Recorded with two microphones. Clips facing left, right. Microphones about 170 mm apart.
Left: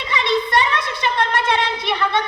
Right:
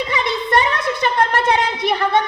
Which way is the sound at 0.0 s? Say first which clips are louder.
Left 1 dB; 50° right (ahead or behind).